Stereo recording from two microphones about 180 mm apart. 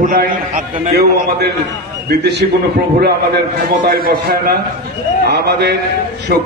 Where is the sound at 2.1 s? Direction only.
70° right (ahead or behind).